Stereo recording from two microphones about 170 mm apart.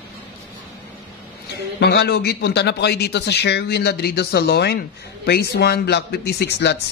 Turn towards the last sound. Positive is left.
turn(degrees=85)